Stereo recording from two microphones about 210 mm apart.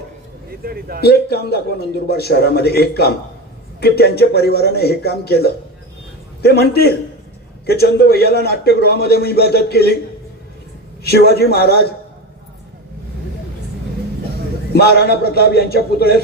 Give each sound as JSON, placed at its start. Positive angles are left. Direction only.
{"t": 0.7, "sound": "a man's voice", "side_deg": -45}
{"t": 1.0, "sound": "a man's voice", "side_deg": 50}
{"t": 11.1, "sound": "a man's voice", "side_deg": 50}
{"t": 14.7, "sound": "a man's voice", "side_deg": 50}